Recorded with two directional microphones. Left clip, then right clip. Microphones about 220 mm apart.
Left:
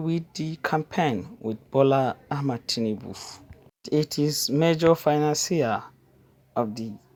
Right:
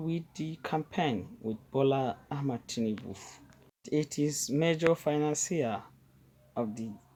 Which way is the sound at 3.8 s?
20° left (ahead or behind).